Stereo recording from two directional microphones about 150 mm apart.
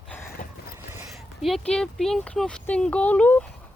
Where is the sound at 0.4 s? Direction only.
60° left (ahead or behind).